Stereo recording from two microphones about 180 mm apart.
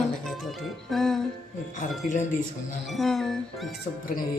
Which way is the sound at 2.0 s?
45° left (ahead or behind).